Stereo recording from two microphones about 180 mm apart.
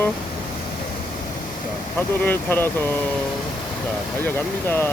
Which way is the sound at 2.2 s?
10° left (ahead or behind).